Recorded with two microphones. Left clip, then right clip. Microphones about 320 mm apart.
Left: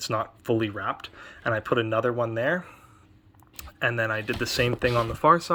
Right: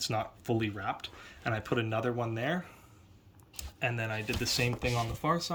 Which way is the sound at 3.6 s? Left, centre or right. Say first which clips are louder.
Left 8 dB; centre.